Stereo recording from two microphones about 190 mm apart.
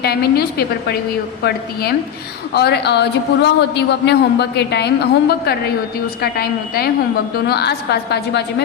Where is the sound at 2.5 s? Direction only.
60° left (ahead or behind).